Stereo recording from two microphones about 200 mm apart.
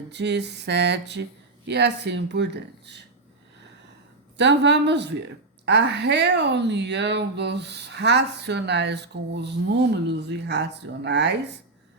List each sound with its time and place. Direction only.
0.1 s speech: 60° right (ahead or behind)
4.4 s speech: 60° right (ahead or behind)